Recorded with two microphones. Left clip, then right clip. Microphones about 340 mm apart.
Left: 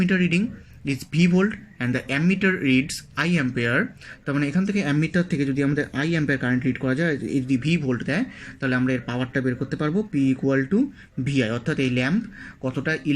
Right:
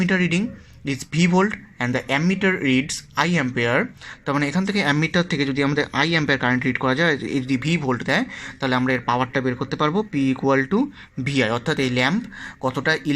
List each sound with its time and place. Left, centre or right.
0.0 s speech: centre